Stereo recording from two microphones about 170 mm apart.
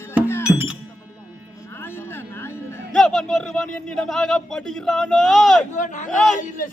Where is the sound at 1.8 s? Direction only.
15° left (ahead or behind).